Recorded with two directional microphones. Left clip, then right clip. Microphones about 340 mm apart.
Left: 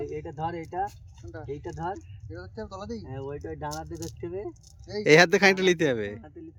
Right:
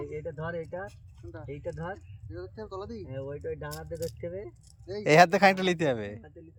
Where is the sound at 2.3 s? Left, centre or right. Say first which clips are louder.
Left 1 dB; centre.